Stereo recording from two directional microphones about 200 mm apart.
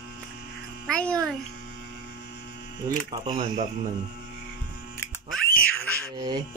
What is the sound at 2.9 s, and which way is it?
Speech, 20° right (ahead or behind).